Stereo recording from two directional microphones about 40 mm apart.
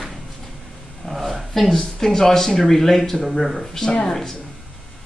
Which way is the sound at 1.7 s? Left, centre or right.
Centre.